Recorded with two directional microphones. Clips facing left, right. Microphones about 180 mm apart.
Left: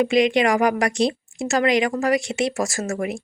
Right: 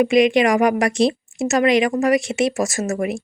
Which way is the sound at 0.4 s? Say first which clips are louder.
Right 3 dB; 20° right (ahead or behind).